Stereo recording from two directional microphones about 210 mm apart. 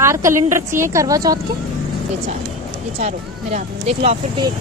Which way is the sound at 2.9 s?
30° right (ahead or behind).